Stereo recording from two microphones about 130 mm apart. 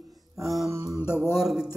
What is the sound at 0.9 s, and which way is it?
Mantra, 20° left (ahead or behind).